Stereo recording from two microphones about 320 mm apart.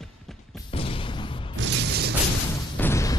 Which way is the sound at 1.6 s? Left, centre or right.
Right.